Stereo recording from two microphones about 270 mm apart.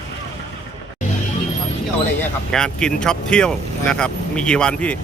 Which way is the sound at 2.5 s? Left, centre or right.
Centre.